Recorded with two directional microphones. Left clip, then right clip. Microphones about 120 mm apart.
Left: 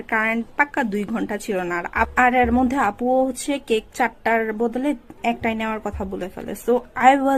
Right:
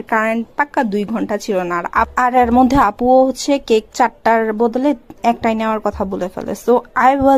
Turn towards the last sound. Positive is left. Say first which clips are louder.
# right 4 dB
turn(degrees=-40)  # may be behind; listen again after turning